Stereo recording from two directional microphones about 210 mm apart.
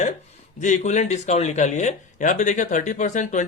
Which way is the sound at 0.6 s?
35° left (ahead or behind).